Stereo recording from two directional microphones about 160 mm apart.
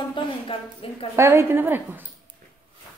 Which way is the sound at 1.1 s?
15° right (ahead or behind).